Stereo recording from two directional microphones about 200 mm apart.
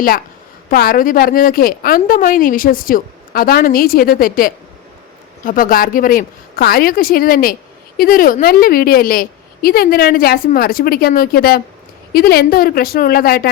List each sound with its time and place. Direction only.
0.7 s a woman's voice: 50° left (ahead or behind)